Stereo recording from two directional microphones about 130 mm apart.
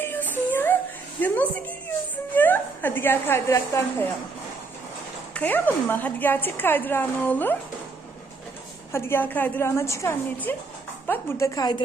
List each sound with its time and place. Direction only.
0.0 s music: 15° left (ahead or behind)
1.2 s a woman's voice: 10° left (ahead or behind)
5.3 s a woman's voice: 10° left (ahead or behind)
8.9 s a woman's voice: 20° left (ahead or behind)